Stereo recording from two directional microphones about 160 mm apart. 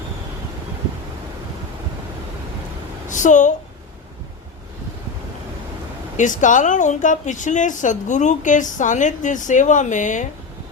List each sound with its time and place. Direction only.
3.1 s a woman's voice: 50° left (ahead or behind)
6.1 s a woman's voice: 50° left (ahead or behind)